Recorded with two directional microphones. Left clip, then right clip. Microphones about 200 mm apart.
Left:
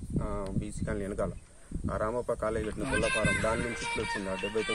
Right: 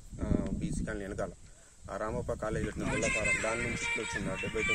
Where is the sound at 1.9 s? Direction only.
10° right (ahead or behind).